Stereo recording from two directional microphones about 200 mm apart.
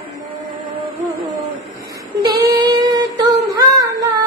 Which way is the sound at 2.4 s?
20° right (ahead or behind).